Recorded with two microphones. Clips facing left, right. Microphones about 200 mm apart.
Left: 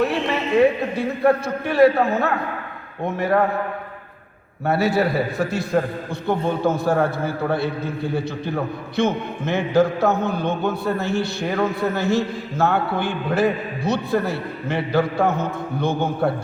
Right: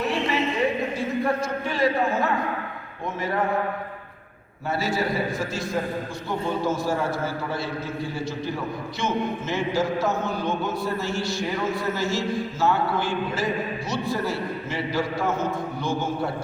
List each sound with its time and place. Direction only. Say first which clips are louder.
0.0 s a sound: left 4 dB; 65° left (ahead or behind)
0.9 s a man's voice: left 6 dB; 60° left (ahead or behind)
4.6 s a man's voice: left 6 dB; 60° left (ahead or behind)